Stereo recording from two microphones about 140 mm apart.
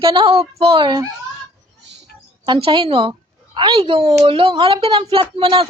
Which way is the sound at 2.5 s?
40° right (ahead or behind).